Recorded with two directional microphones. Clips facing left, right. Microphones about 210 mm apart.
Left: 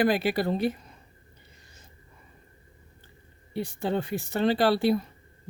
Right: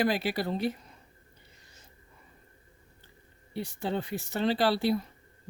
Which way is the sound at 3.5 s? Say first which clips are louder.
Left 4 dB; 55° left (ahead or behind).